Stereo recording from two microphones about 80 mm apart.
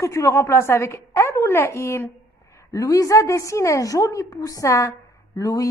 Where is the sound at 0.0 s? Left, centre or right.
Left.